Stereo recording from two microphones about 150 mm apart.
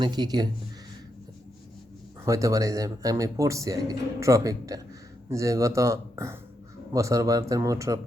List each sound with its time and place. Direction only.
0.0 s speech: 30° right (ahead or behind)
2.2 s speech: 20° right (ahead or behind)